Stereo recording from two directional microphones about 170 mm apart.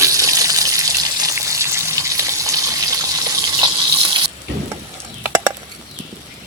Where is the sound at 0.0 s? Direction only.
20° right (ahead or behind).